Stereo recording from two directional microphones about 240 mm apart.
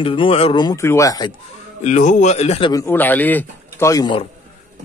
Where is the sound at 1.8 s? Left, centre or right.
Left.